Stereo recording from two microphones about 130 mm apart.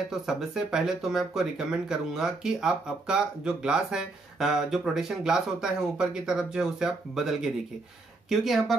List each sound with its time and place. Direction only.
0.1 s speech: 5° right (ahead or behind)